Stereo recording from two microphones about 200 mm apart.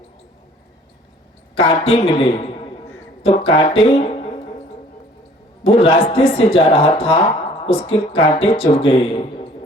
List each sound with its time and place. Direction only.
1.5 s speech: 25° left (ahead or behind)
5.6 s speech: 30° left (ahead or behind)